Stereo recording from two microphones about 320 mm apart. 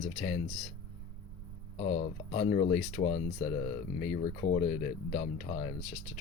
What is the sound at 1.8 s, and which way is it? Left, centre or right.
Speech, centre.